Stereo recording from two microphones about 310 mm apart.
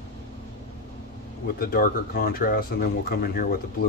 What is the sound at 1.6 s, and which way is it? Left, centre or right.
Speech, left.